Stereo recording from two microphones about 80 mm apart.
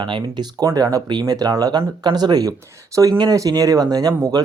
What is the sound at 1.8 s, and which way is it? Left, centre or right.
Speech, right.